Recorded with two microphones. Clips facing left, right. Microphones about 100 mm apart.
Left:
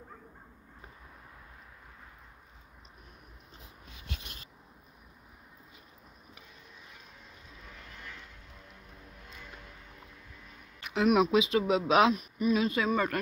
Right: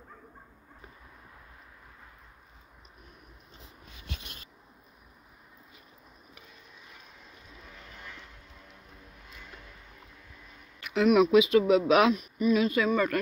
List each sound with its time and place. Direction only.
10.8 s speech: 30° left (ahead or behind)